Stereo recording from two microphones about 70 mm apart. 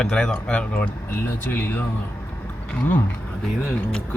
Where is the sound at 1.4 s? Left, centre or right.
Left.